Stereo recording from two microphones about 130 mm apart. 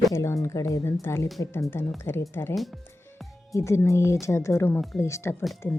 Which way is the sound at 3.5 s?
20° left (ahead or behind).